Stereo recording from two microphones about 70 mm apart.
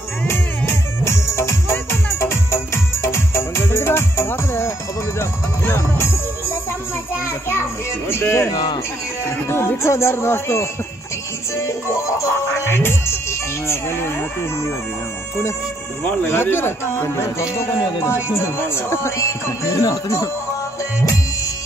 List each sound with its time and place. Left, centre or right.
0.3 s music: left
8.1 s speech: left
9.5 s speech: left
11.5 s music: left
16.0 s speech: left
16.3 s speech: left